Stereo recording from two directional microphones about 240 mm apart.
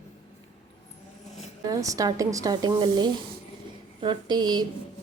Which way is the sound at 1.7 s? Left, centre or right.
Centre.